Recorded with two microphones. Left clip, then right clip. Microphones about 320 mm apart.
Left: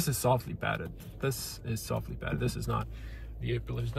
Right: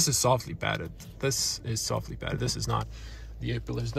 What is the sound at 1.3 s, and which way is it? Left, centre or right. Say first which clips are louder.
Speech: right 12 dB; centre.